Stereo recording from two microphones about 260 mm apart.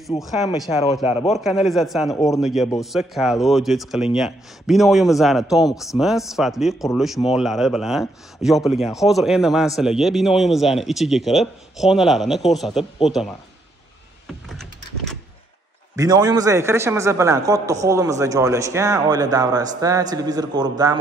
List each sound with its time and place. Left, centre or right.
0.2 s a man's voice: centre
1.0 s a man's voice: left
1.7 s a man's voice: centre
2.1 s speech: centre
2.4 s a man's voice: centre
14.2 s power windows: centre
16.0 s a man's voice: centre